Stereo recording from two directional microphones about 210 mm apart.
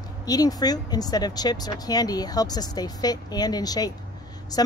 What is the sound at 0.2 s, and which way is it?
Speech, 20° left (ahead or behind).